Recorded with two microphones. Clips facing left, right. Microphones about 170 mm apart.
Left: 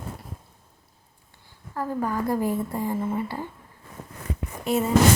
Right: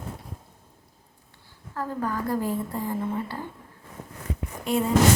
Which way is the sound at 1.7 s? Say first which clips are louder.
Left 2 dB; 10° left (ahead or behind).